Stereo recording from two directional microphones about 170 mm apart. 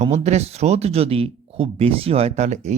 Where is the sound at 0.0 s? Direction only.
40° right (ahead or behind).